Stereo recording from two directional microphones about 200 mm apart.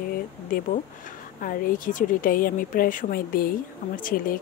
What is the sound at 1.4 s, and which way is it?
Speech, 45° left (ahead or behind).